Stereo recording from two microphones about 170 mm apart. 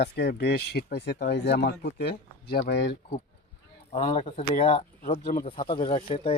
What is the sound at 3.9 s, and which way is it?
Speech, 35° left (ahead or behind).